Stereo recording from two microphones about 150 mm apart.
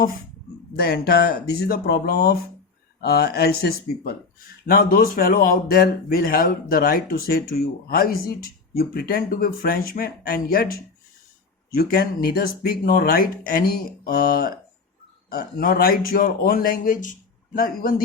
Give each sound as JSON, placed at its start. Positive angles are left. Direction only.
{"t": 0.8, "sound": "speech", "side_deg": 90}
{"t": 4.6, "sound": "speech", "side_deg": 80}
{"t": 15.3, "sound": "speech", "side_deg": 80}